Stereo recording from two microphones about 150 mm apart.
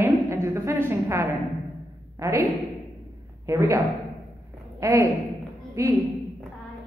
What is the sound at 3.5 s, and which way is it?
Speech, 20° right (ahead or behind).